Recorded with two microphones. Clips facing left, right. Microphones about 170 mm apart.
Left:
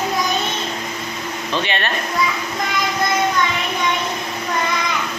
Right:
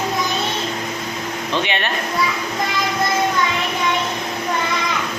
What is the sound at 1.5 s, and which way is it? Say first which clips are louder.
Speech: even; 15° right (ahead or behind).